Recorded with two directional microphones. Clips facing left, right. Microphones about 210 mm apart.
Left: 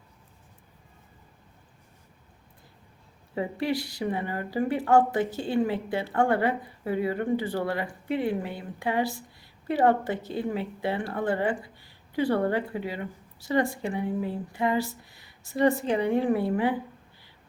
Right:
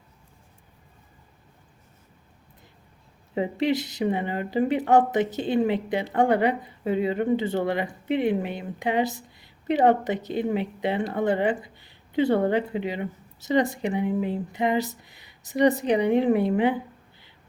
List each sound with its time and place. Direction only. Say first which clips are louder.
3.3 s speech: right 4 dB; 20° right (ahead or behind)